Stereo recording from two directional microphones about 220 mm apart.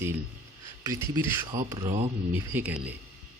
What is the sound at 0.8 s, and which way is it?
Speech, 15° right (ahead or behind).